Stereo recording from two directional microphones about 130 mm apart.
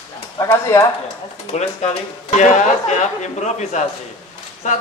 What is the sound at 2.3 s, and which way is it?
Speech, 65° left (ahead or behind).